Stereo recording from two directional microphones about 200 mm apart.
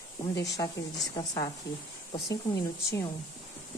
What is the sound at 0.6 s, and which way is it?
Speech, 20° left (ahead or behind).